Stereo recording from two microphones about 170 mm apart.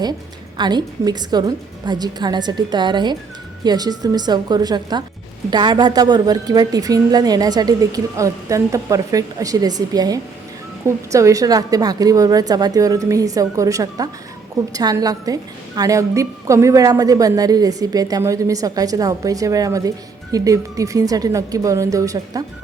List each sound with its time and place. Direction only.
0.5 s a woman's voice: 25° right (ahead or behind)